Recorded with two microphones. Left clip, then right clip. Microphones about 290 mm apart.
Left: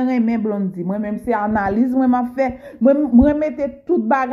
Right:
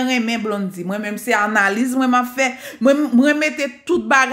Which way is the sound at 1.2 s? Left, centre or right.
Centre.